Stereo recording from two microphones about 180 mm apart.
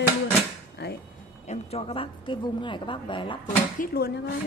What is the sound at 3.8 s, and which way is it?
Speech, 60° left (ahead or behind).